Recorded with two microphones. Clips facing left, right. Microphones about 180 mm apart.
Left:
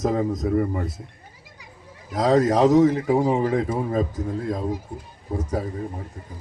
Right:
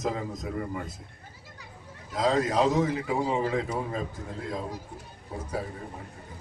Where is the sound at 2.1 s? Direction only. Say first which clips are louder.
Left 7 dB; 45° left (ahead or behind).